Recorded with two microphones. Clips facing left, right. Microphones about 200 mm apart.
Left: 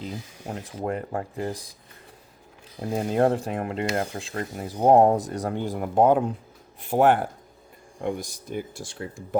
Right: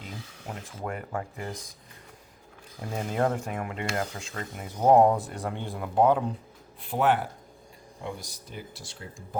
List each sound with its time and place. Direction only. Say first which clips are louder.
0.4 s speech: left 6 dB; 35° left (ahead or behind)
2.8 s speech: left 7 dB; 20° left (ahead or behind)
3.2 s speech: left 5 dB; 35° left (ahead or behind); by 9.4 s 60° left (ahead or behind)